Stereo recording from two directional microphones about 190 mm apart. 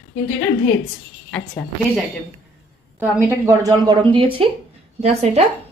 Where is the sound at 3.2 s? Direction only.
15° right (ahead or behind); by 5.4 s 35° right (ahead or behind).